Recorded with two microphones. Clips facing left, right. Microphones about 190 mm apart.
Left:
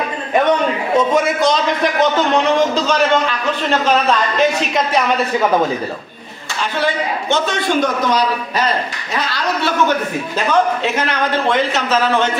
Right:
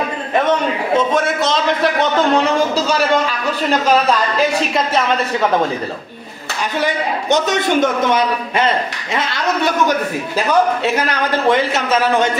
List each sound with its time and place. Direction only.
0.9 s a woman's voice: centre (ahead or behind)
6.8 s a man's voice: 15° right (ahead or behind)